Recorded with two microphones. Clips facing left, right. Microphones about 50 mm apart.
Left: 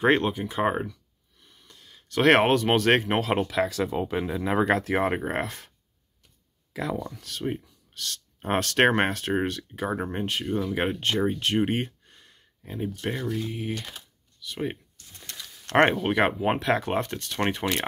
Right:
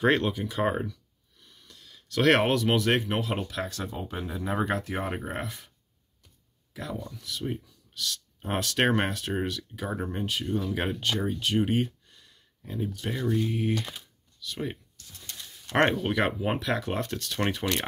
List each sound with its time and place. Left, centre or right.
0.0 s speech: left
1.4 s a sound: left
3.2 s speech: left
6.7 s speech: left
7.2 s speech: left
7.4 s speech: left
7.9 s speech: left
12.7 s speech: left
13.4 s speech: centre
14.4 s a sound: left
15.7 s speech: left